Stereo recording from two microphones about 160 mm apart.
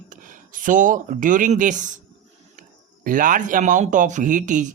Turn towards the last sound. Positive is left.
turn(degrees=-50)  # may be behind; listen again after turning